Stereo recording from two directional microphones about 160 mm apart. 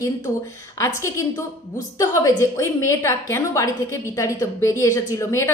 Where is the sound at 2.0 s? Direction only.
20° left (ahead or behind).